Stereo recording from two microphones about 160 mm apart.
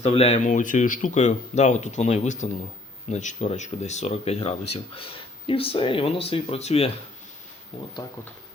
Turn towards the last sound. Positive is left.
turn(degrees=40)  # may be behind; listen again after turning